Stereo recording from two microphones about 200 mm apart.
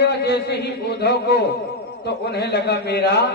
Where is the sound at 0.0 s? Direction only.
55° left (ahead or behind).